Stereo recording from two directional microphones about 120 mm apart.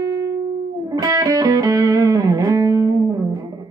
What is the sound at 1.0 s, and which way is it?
Music, 30° right (ahead or behind).